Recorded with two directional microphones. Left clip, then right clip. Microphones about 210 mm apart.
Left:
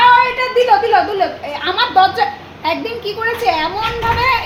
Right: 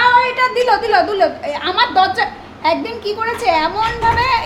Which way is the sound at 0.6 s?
20° right (ahead or behind).